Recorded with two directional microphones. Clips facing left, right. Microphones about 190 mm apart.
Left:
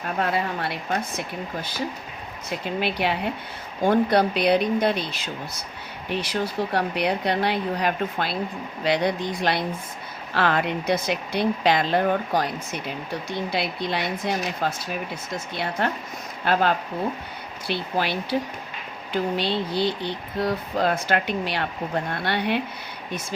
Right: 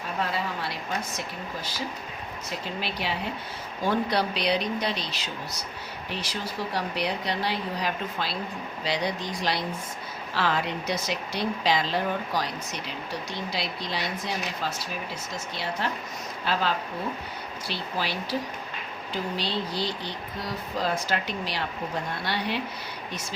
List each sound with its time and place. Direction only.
0.2 s speech: 60° left (ahead or behind)
2.8 s speech: 60° left (ahead or behind)
19.4 s speech: 60° left (ahead or behind)